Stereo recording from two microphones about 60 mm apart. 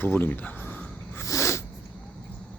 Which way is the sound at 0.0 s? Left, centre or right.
Left.